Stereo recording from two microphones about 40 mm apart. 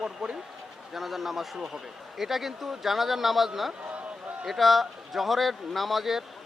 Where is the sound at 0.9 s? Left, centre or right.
Centre.